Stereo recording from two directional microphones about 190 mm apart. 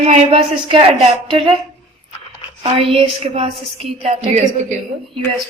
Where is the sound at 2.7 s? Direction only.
30° right (ahead or behind).